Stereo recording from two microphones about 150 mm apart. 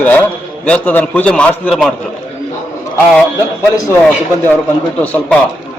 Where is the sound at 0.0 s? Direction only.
10° left (ahead or behind).